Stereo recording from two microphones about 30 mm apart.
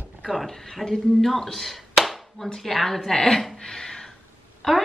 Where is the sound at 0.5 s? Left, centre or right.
Centre.